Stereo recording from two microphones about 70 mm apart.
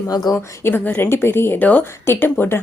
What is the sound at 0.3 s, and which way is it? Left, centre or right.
Speech, left.